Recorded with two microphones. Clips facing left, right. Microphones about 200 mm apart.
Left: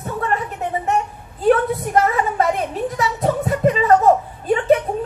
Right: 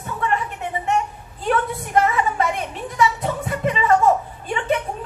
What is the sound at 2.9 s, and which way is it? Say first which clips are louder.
Music: right 1 dB; 40° left (ahead or behind).